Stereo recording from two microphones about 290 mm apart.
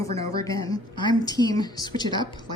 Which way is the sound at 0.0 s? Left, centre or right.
Centre.